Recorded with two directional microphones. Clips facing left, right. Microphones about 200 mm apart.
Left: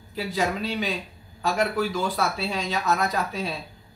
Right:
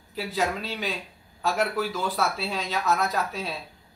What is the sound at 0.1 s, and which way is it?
Speech, centre (ahead or behind).